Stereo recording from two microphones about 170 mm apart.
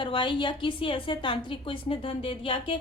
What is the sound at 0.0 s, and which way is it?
A woman's voice, 30° left (ahead or behind).